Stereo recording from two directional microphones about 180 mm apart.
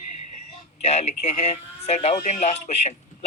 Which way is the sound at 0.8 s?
35° left (ahead or behind).